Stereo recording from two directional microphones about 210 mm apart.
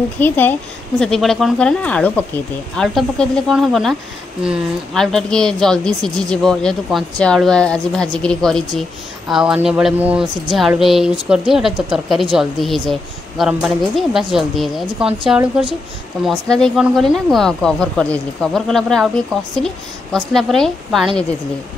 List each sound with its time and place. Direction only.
0.2 s a woman's voice: 10° left (ahead or behind)